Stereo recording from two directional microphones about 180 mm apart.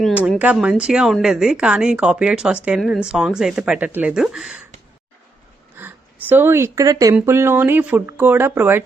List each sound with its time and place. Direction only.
0.0 s speech: 5° right (ahead or behind)
5.7 s speech: 10° right (ahead or behind)